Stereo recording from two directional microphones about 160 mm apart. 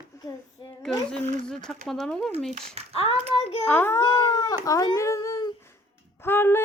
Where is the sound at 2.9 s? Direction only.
35° left (ahead or behind).